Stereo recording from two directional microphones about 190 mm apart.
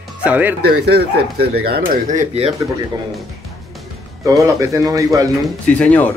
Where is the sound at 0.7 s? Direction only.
60° right (ahead or behind); by 2.5 s 35° right (ahead or behind).